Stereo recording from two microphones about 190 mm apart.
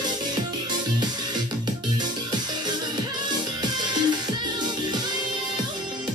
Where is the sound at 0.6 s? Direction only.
20° right (ahead or behind).